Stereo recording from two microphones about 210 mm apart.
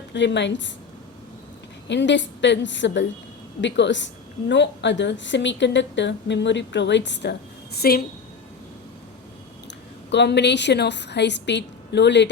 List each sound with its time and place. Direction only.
0.1 s a woman's voice: 55° left (ahead or behind)
1.9 s a woman's voice: 60° left (ahead or behind)
10.1 s a woman's voice: 55° left (ahead or behind)